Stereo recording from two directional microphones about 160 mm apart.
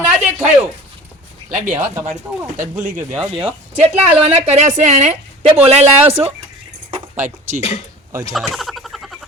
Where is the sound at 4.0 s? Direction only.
45° right (ahead or behind).